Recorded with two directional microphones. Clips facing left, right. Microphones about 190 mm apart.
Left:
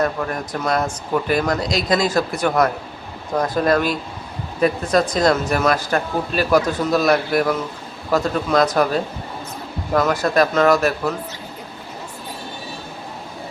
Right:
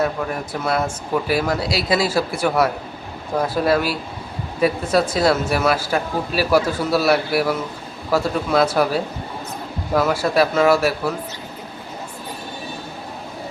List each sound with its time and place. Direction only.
0.0 s speech: 5° right (ahead or behind)